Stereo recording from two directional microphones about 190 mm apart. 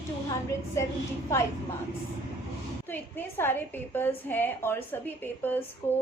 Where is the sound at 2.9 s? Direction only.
10° left (ahead or behind).